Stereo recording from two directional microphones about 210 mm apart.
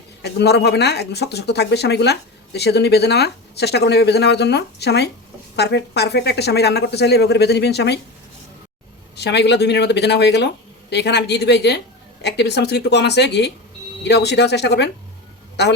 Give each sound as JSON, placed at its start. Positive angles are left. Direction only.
{"t": 0.2, "sound": "speech", "side_deg": 50}
{"t": 9.1, "sound": "speech", "side_deg": 55}